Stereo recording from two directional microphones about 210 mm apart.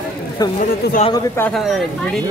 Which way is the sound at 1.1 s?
15° left (ahead or behind).